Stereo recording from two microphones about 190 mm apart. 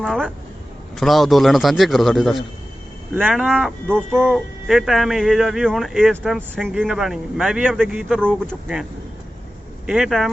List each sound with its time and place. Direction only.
0.0 s speech: centre (ahead or behind)
3.4 s speech: centre (ahead or behind)